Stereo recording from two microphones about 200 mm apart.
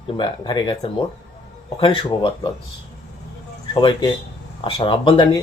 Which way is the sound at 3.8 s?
25° left (ahead or behind).